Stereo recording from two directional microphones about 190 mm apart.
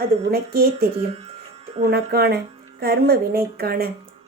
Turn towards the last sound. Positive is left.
turn(degrees=-55)  # may be behind; listen again after turning